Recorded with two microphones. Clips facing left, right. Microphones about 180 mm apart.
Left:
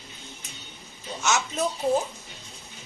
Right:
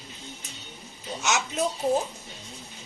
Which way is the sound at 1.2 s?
15° right (ahead or behind).